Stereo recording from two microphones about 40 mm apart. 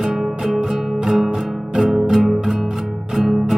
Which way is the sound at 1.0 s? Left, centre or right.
Centre.